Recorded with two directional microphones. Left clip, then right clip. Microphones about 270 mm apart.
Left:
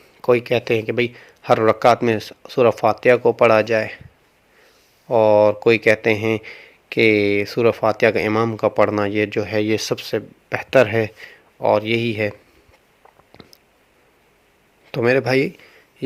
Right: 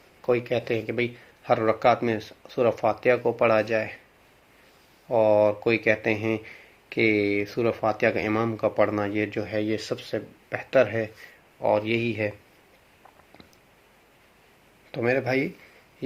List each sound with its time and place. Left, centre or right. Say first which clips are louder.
0.2 s speech: left 7 dB; left
5.0 s speech: left 6 dB; left
14.9 s speech: left 7 dB; left